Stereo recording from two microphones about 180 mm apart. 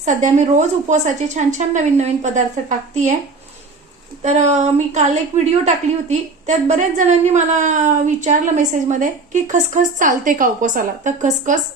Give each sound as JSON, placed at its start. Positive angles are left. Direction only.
{"t": 0.0, "sound": "a woman's voice", "side_deg": -40}
{"t": 4.2, "sound": "a woman's voice", "side_deg": -40}